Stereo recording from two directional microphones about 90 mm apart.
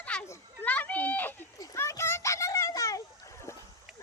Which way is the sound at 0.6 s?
15° left (ahead or behind).